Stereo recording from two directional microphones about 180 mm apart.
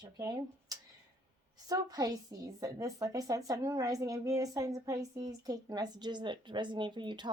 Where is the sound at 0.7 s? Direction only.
20° right (ahead or behind).